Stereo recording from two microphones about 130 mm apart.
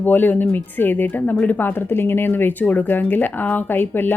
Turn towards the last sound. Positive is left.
turn(degrees=15)  # may be behind; listen again after turning